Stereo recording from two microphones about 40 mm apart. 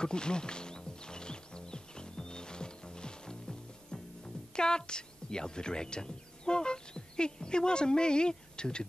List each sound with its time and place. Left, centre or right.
0.0 s music: left